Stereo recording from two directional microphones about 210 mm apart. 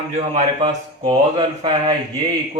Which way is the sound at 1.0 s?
20° right (ahead or behind).